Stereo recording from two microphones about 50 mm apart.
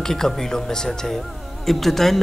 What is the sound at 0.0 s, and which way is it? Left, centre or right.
Speech, centre.